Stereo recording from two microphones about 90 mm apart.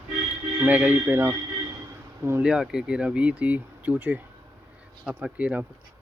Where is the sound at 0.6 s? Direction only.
15° right (ahead or behind).